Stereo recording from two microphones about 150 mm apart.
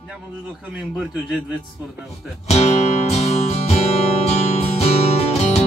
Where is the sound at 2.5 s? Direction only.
45° left (ahead or behind).